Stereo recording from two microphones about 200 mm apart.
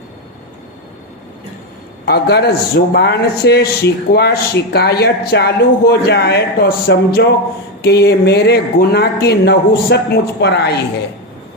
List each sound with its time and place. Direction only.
2.0 s a man's voice: 55° left (ahead or behind)